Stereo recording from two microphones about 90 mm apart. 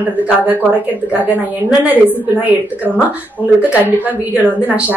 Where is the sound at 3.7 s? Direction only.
20° right (ahead or behind).